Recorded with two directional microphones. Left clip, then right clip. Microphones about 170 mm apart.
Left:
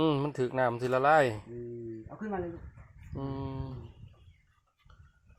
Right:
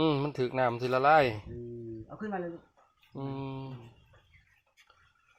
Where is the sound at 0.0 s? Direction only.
Centre (ahead or behind).